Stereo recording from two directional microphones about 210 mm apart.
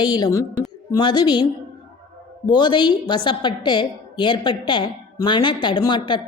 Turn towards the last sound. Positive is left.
turn(degrees=20)  # may be behind; listen again after turning